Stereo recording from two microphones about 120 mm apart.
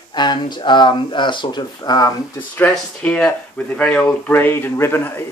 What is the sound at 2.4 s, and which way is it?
Speech, 15° left (ahead or behind).